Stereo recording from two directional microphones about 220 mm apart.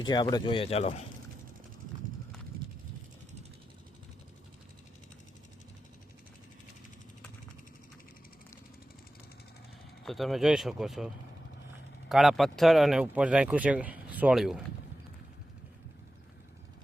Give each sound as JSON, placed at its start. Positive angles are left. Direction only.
{"t": 0.0, "sound": "speech", "side_deg": 20}
{"t": 10.0, "sound": "speech", "side_deg": 0}